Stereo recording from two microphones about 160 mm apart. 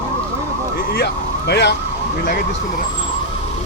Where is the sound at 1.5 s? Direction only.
90° left.